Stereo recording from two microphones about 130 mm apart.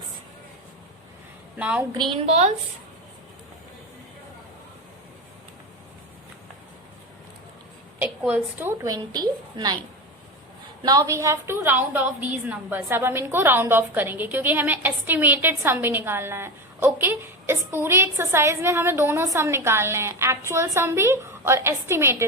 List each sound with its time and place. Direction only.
1.5 s a woman's voice: 10° right (ahead or behind)
1.9 s a woman's voice: 35° right (ahead or behind)
2.2 s a woman's voice: 60° right (ahead or behind)
8.0 s a woman's voice: 15° right (ahead or behind); by 9.7 s 35° right (ahead or behind)
10.8 s a woman's voice: 25° right (ahead or behind)